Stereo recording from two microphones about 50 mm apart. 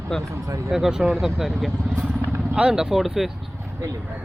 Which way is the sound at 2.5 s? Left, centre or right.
Right.